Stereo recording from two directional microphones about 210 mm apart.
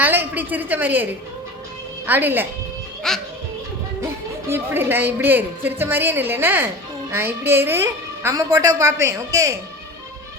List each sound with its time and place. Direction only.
0.0 s a woman's voice: 10° right (ahead or behind)
2.0 s speech: 10° right (ahead or behind)
3.1 s music: centre (ahead or behind)
4.0 s speech: 10° right (ahead or behind)